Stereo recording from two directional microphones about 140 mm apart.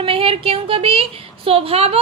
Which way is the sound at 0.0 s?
40° right (ahead or behind).